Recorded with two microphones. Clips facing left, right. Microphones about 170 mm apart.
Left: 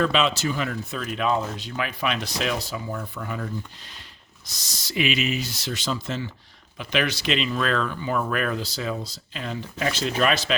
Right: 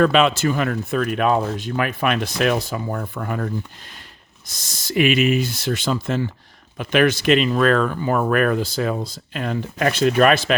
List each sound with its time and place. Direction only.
0.0 s speech: 55° right (ahead or behind)